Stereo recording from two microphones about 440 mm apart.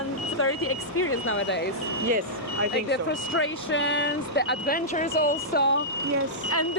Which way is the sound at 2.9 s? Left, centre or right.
Left.